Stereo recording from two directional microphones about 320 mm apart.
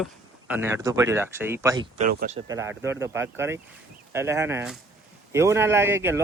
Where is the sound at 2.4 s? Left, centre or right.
Centre.